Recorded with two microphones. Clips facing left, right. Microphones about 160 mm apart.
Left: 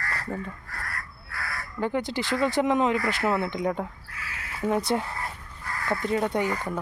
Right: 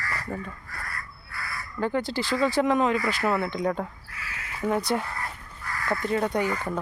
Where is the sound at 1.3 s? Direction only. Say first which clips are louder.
Left 1 dB; 70° left (ahead or behind).